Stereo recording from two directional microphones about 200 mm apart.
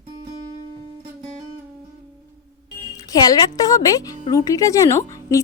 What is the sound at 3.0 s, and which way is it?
A woman's voice, 20° left (ahead or behind).